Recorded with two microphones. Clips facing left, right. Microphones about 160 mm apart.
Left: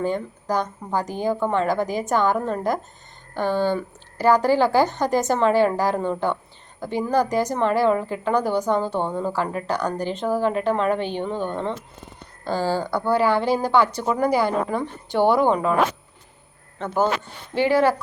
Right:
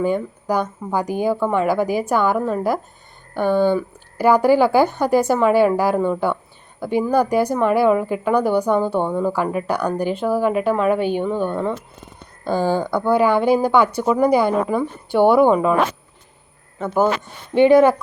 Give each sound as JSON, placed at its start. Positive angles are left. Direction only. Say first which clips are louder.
{"t": 0.0, "sound": "a woman's voice", "louder": "right 4 dB", "side_deg": -10}
{"t": 16.7, "sound": "speech", "louder": "right 4 dB", "side_deg": -10}